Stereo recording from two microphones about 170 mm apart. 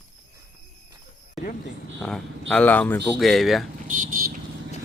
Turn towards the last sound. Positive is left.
turn(degrees=-55)  # may be behind; listen again after turning